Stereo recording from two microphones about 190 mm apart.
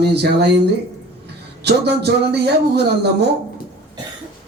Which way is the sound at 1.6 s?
60° right (ahead or behind).